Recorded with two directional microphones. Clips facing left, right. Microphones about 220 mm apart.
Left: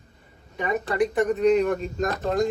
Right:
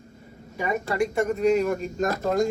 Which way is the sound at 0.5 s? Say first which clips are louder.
Left 1 dB; centre (ahead or behind).